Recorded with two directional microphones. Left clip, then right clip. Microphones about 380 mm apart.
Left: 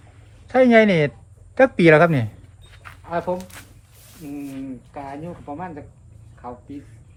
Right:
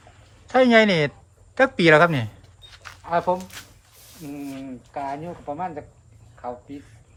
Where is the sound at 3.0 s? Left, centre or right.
Right.